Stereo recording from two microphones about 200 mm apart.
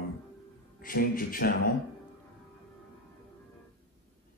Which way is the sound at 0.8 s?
45° left (ahead or behind).